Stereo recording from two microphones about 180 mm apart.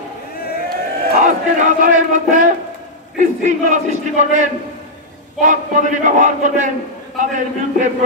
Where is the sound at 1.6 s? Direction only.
45° right (ahead or behind).